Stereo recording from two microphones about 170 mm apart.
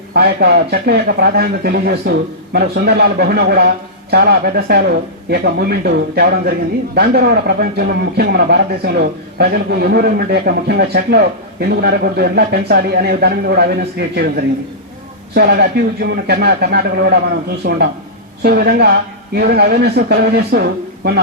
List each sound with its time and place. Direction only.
0.1 s a man's voice: 70° right (ahead or behind)